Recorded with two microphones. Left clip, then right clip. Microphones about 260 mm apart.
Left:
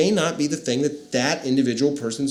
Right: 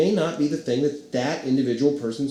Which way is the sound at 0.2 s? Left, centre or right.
Left.